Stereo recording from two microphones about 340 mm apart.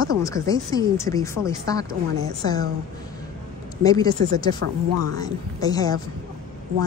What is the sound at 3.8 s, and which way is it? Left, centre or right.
Speech, centre.